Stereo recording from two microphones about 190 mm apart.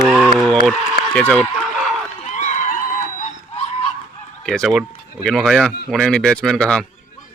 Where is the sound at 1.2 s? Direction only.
5° left (ahead or behind).